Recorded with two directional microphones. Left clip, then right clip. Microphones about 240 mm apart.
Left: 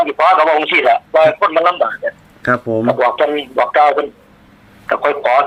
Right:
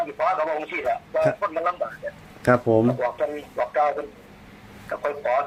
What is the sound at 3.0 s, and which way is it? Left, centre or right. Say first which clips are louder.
Speech: left 12 dB; left.